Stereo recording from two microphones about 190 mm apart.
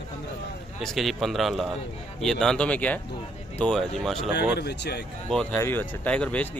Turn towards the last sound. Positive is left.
turn(degrees=5)  # may be behind; listen again after turning